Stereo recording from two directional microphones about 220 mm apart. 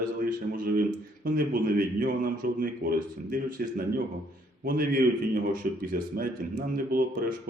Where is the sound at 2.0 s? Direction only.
40° right (ahead or behind).